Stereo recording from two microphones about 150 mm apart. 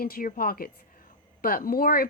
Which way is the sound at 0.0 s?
70° left (ahead or behind).